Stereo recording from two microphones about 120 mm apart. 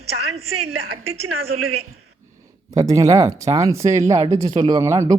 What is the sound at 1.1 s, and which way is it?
Speech, 60° right (ahead or behind).